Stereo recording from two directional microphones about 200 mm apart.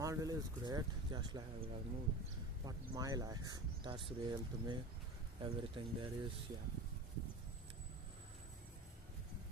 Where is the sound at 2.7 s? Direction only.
20° right (ahead or behind).